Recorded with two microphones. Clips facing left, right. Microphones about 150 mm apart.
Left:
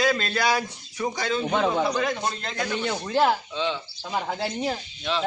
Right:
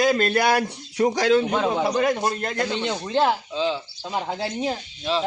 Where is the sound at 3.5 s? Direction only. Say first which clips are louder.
Right 3 dB; 35° right (ahead or behind).